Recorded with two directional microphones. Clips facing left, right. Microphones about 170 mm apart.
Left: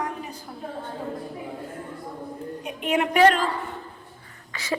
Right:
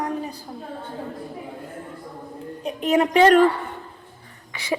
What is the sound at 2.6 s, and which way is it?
Speech, 40° right (ahead or behind).